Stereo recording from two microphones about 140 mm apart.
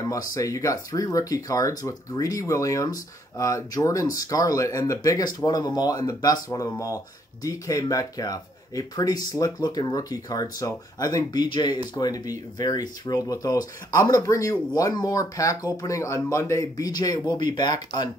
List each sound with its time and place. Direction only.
0.3 s speech: 25° left (ahead or behind)